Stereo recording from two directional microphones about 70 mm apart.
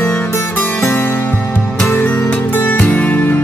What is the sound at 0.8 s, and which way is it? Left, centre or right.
Music, left.